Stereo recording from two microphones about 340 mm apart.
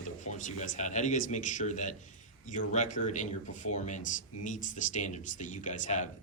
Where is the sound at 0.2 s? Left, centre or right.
Left.